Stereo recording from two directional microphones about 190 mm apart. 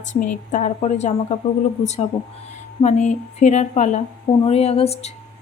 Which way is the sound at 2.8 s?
40° left (ahead or behind).